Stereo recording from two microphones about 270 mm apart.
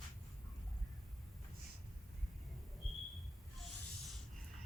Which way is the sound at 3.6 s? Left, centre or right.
Centre.